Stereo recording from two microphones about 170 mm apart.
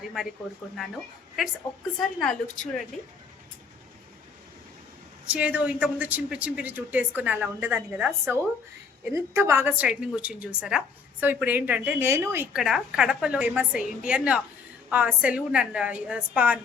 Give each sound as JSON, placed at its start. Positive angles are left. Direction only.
{"t": 2.0, "sound": "a woman's voice", "side_deg": 0}
{"t": 5.2, "sound": "a woman's voice", "side_deg": -5}
{"t": 12.5, "sound": "a woman's voice", "side_deg": -5}